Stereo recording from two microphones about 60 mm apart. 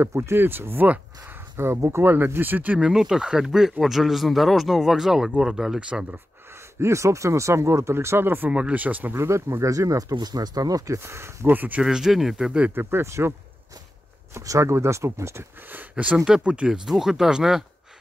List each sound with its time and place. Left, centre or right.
0.0 s speech: right
0.4 s speech: right
2.8 s speech: centre
6.8 s speech: right
8.5 s speech: centre
9.1 s speech: right
11.0 s speech: right
11.5 s speech: right
11.8 s speech: centre
12.7 s speech: right
14.6 s speech: right
15.7 s speech: right; by 17.6 s centre